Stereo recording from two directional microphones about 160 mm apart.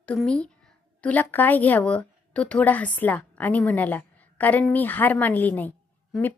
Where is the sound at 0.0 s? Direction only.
5° left (ahead or behind).